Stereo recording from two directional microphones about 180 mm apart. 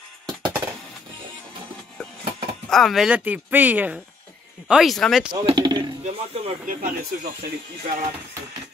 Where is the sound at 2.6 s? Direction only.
Centre (ahead or behind).